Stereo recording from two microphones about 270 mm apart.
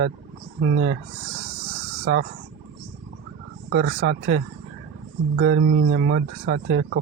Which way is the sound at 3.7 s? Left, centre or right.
Right.